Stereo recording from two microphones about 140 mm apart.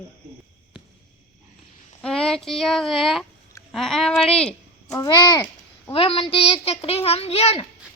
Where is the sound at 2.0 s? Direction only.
5° left (ahead or behind).